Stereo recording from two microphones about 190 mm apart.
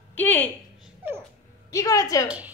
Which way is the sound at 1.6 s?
15° left (ahead or behind).